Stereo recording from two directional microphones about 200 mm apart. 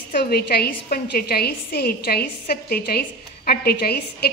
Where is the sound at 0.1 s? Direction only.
50° left (ahead or behind).